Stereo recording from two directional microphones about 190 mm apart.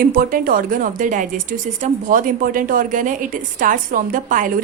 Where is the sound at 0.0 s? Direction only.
50° right (ahead or behind).